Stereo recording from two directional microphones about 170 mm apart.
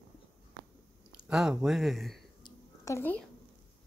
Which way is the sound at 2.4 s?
15° left (ahead or behind).